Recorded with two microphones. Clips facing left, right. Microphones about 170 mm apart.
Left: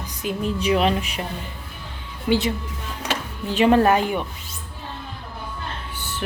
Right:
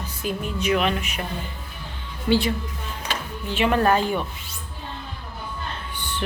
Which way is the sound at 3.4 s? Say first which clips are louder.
Left 4 dB; 35° left (ahead or behind).